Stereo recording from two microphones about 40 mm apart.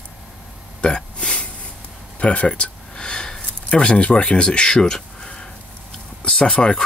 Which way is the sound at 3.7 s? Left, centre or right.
Left.